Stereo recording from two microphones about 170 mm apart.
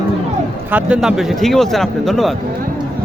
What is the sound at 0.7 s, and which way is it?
Speech, 5° right (ahead or behind).